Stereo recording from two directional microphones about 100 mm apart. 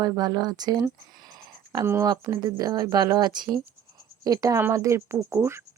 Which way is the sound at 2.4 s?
40° right (ahead or behind).